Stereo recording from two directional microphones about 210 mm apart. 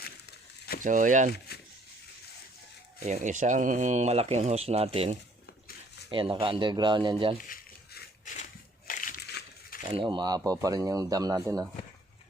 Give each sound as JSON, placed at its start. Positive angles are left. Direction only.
{"t": 0.0, "sound": "crumpling", "side_deg": 50}
{"t": 0.8, "sound": "speech", "side_deg": -40}
{"t": 1.5, "sound": "a sound", "side_deg": 50}
{"t": 3.0, "sound": "speech", "side_deg": -35}
{"t": 7.3, "sound": "crumpling", "side_deg": 40}
{"t": 9.9, "sound": "speech", "side_deg": -25}